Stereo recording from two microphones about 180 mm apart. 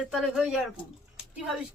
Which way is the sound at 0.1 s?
Centre (ahead or behind).